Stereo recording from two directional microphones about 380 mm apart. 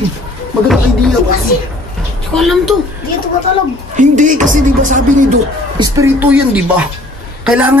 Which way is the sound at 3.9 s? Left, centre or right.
Centre.